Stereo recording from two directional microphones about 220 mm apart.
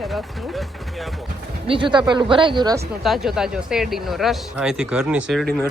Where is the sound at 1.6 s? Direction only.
25° right (ahead or behind).